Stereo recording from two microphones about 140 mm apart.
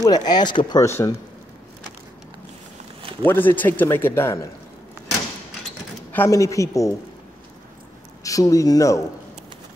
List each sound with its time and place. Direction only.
0.0 s speech: 30° left (ahead or behind)
0.8 s speech: 20° left (ahead or behind)
3.0 s a sound: 40° right (ahead or behind)
3.3 s speech: 15° left (ahead or behind)
6.1 s speech: 20° left (ahead or behind)
8.2 s speech: 25° left (ahead or behind)